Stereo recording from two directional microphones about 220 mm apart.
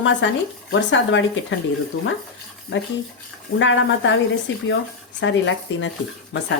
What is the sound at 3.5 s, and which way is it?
Speech, 60° left (ahead or behind).